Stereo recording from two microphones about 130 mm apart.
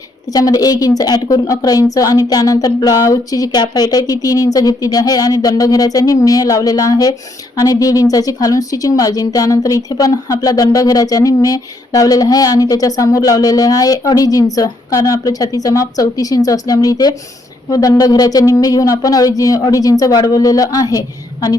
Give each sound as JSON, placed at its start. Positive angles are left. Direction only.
{"t": 0.3, "sound": "a woman's voice", "side_deg": 30}